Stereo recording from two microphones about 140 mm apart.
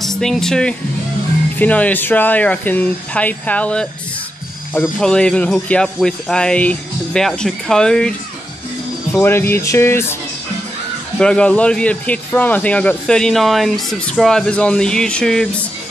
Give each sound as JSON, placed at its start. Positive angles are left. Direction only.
{"t": 0.0, "sound": "speech", "side_deg": 5}
{"t": 4.8, "sound": "speech", "side_deg": 5}
{"t": 9.1, "sound": "speech", "side_deg": 15}
{"t": 11.1, "sound": "speech", "side_deg": 5}